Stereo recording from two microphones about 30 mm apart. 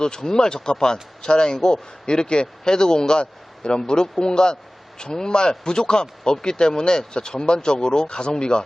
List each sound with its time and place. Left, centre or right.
0.0 s speech: left